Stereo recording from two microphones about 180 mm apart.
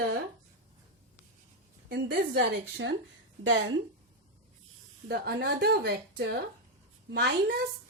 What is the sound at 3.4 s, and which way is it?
Speech, 90° right.